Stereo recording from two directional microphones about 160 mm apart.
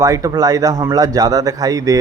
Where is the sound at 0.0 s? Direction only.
20° right (ahead or behind).